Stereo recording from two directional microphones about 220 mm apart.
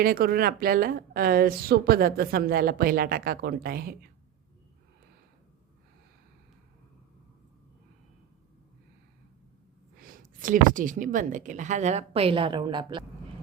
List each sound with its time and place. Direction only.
0.0 s speech: 40° right (ahead or behind)
10.0 s speech: 40° right (ahead or behind); by 13.1 s 20° right (ahead or behind)